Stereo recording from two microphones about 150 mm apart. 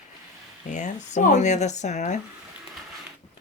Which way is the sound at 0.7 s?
55° left (ahead or behind).